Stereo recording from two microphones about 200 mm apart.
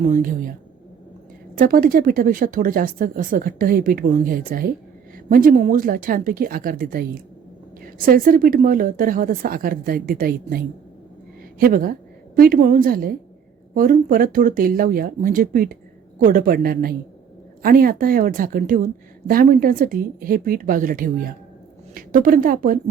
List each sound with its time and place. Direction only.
0.1 s speech: 45° right (ahead or behind)
1.5 s speech: 45° right (ahead or behind)
11.6 s speech: 45° right (ahead or behind)